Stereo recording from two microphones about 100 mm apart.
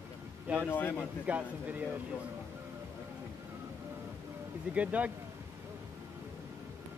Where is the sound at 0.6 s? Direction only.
20° left (ahead or behind).